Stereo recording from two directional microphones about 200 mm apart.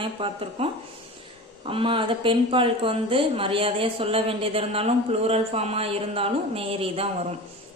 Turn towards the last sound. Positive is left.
turn(degrees=-30)  # may be behind; listen again after turning